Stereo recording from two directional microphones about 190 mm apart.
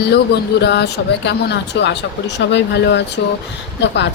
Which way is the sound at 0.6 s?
65° left (ahead or behind).